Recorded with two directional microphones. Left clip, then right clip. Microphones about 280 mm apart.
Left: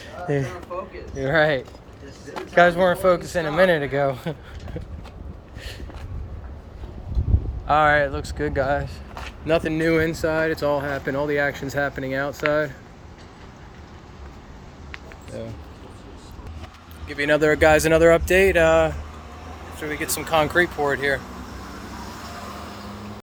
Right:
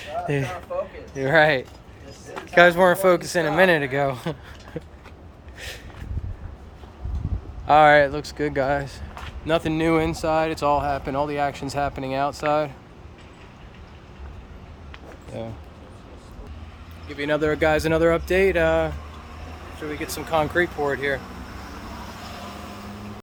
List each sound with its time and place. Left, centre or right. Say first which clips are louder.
0.0 s a sound: even; centre
1.1 s speech: right 2 dB; centre
5.5 s a sound: right 3 dB; centre
7.7 s speech: right 3 dB; centre
9.5 s speech: left 1 dB; centre
17.1 s speech: left 4 dB; centre